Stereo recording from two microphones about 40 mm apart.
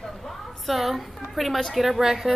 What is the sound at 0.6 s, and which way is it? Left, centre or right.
A woman's voice, centre.